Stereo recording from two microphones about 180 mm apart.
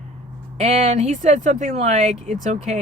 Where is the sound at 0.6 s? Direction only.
40° right (ahead or behind).